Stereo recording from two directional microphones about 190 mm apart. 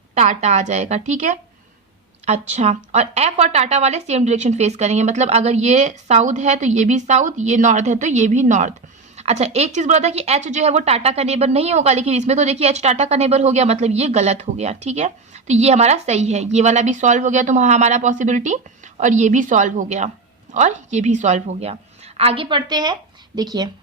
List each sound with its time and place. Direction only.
0.1 s a woman's voice: 35° right (ahead or behind); by 23.6 s 20° right (ahead or behind)